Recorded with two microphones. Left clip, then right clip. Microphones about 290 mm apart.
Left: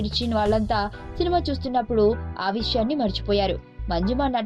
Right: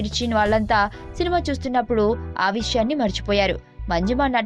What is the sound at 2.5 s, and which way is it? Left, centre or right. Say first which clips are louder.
Speech: right 2 dB; right.